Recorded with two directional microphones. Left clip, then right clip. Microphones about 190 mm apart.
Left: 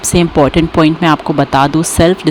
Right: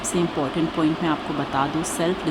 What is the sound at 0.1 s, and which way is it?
Speech, 50° left (ahead or behind).